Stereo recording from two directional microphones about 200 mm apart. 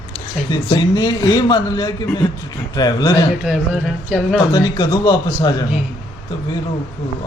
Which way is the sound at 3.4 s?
Centre (ahead or behind).